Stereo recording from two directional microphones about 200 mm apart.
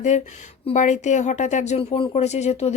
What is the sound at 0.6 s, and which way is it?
Speech, 35° left (ahead or behind).